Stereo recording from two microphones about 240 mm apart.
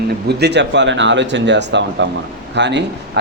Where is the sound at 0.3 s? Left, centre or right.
Right.